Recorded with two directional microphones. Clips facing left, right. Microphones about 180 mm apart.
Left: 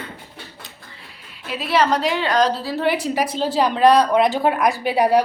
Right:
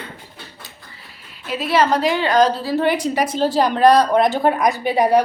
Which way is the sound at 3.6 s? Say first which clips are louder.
Right 1 dB; 35° right (ahead or behind).